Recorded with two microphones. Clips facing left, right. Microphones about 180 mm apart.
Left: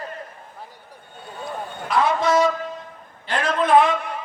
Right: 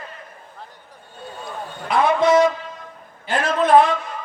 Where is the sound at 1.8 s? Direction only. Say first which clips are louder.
Right 3 dB; 55° right (ahead or behind).